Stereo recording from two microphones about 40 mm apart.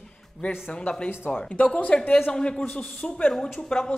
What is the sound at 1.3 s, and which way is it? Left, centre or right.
Speech, left.